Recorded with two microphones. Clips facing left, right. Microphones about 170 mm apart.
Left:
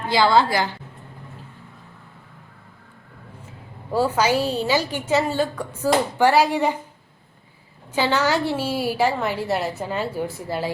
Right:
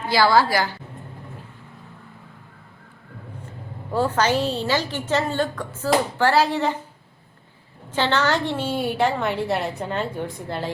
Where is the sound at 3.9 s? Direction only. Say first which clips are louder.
Left 1 dB; 10° left (ahead or behind).